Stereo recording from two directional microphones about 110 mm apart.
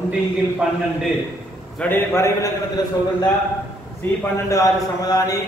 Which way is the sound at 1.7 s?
20° left (ahead or behind).